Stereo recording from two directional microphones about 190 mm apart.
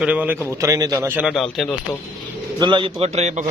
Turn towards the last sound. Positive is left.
turn(degrees=-35)  # may be behind; listen again after turning